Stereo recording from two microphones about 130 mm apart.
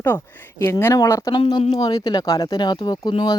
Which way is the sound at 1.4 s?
50° left (ahead or behind).